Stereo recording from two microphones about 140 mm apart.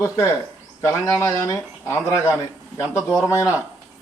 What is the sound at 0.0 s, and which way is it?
Speech, 20° left (ahead or behind).